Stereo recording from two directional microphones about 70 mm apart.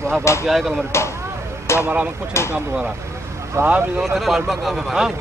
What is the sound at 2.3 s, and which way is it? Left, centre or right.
Speech, left.